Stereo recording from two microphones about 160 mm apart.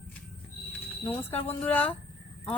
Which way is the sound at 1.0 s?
10° left (ahead or behind).